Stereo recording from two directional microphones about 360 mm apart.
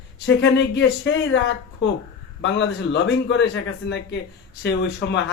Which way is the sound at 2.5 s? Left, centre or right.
Left.